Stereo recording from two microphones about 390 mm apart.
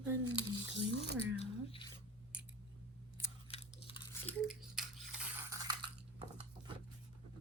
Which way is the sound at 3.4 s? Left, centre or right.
Centre.